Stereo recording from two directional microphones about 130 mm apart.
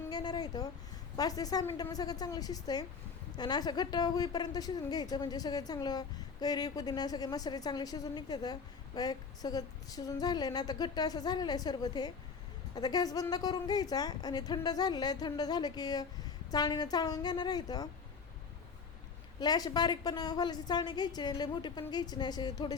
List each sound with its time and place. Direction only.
0.1 s a sound: 30° left (ahead or behind)
1.1 s a woman's voice: 30° left (ahead or behind)
19.4 s a woman's voice: 30° left (ahead or behind)